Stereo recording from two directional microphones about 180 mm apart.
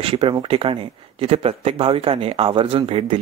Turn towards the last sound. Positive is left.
turn(degrees=-30)  # may be behind; listen again after turning